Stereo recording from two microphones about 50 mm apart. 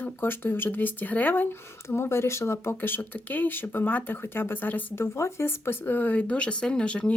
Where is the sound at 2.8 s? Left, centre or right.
Left.